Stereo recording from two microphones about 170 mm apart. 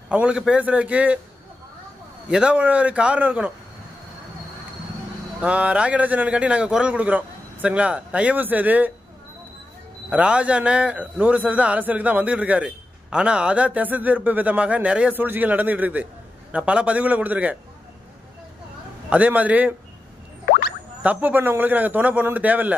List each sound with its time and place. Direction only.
0.1 s a man's voice: 5° right (ahead or behind)
2.2 s a man's voice: 5° right (ahead or behind)
5.4 s a man's voice: 5° right (ahead or behind)
10.0 s a man's voice: 5° right (ahead or behind)
19.0 s a man's voice: 10° right (ahead or behind)
20.4 s music: 55° left (ahead or behind)
21.0 s a man's voice: 10° right (ahead or behind)